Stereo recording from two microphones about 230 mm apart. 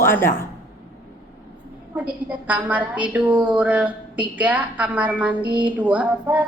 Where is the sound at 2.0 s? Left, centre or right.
Centre.